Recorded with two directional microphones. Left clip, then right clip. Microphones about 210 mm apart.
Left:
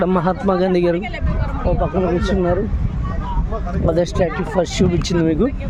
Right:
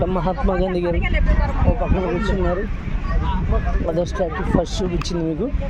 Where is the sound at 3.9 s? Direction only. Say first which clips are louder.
Left 4 dB; 30° left (ahead or behind).